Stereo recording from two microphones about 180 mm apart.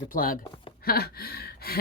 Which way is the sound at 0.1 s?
50° left (ahead or behind).